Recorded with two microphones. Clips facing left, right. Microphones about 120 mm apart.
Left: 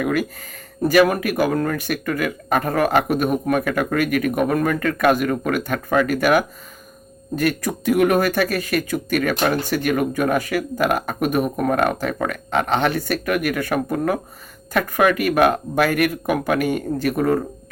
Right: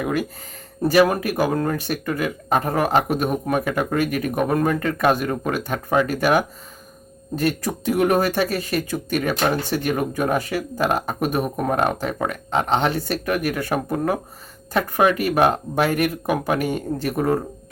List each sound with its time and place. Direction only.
0.0 s speech: 25° right (ahead or behind)